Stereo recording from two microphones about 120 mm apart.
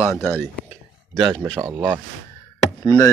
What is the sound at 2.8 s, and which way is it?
Speech, 30° left (ahead or behind).